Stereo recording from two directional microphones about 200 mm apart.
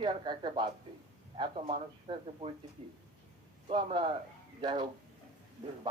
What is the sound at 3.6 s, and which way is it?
Speech, 25° right (ahead or behind).